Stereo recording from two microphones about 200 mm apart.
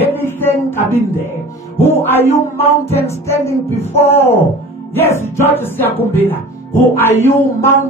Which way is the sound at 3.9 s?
30° left (ahead or behind).